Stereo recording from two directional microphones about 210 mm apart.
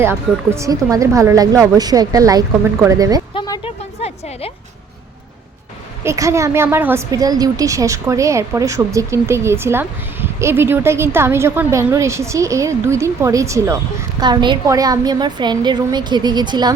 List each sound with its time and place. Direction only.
0.0 s a woman's voice: 10° right (ahead or behind)
3.3 s a sound: 20° left (ahead or behind)
6.0 s a woman's voice: 15° right (ahead or behind)